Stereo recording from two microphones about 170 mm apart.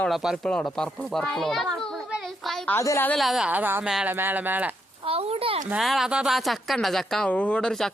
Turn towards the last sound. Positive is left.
turn(degrees=5)  # may be behind; listen again after turning